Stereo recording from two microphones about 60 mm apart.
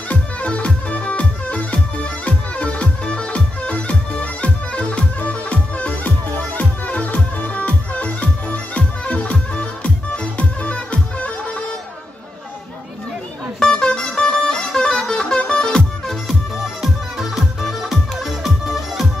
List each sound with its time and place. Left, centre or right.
0.1 s music: left
13.6 s music: centre
16.3 s music: centre